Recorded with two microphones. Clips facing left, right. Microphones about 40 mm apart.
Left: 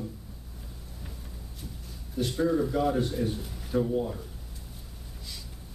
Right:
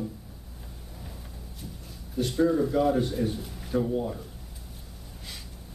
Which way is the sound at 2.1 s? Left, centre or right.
Centre.